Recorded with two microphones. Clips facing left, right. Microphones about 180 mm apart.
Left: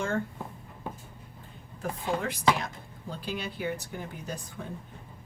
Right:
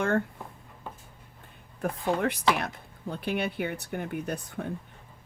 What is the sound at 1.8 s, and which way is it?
Speech, 60° right (ahead or behind).